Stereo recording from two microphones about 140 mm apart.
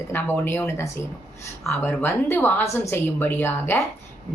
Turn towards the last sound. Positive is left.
turn(degrees=15)  # may be behind; listen again after turning